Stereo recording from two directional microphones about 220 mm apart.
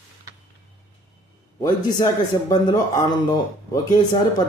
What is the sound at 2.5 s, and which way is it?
Speech, 20° left (ahead or behind).